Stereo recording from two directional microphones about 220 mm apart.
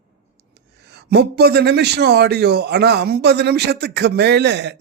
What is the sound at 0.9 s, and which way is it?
Speech, 50° right (ahead or behind).